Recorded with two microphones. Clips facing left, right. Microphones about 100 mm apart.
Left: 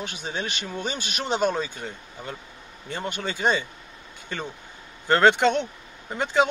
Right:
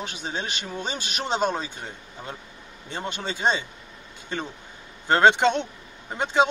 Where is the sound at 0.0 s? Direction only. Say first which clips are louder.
Even; 30° right (ahead or behind).